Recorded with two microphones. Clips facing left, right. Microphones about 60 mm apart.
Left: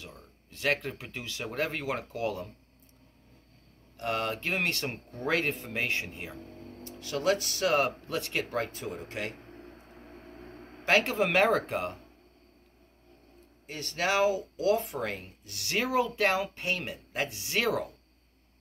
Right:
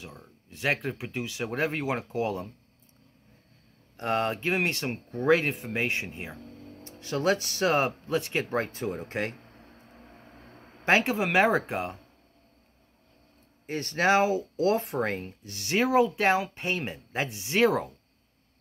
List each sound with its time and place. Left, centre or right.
0.0 s speech: centre
3.9 s speech: right
11.1 s speech: centre
13.7 s speech: right